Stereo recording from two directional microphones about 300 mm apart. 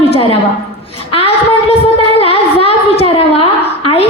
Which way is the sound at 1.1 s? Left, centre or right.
Centre.